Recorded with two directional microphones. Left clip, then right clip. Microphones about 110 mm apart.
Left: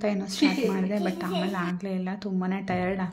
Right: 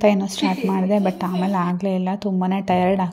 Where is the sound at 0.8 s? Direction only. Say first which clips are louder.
Right 9 dB; 60° right (ahead or behind).